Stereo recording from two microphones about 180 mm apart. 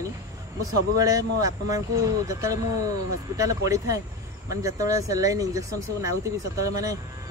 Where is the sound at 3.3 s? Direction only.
20° right (ahead or behind).